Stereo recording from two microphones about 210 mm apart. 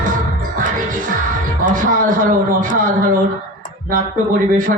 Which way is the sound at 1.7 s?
40° right (ahead or behind).